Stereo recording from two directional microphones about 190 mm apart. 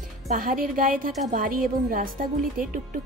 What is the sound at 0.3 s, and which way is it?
A woman's voice, 45° right (ahead or behind).